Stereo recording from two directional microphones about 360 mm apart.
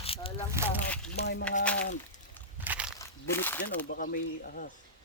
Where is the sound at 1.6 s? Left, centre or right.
Centre.